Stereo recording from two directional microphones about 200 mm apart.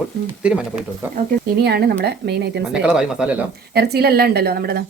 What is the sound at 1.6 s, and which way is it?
Speech, 55° right (ahead or behind).